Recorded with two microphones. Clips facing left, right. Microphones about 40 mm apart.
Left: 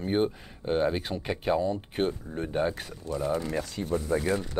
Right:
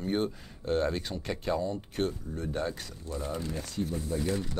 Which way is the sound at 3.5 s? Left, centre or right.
Left.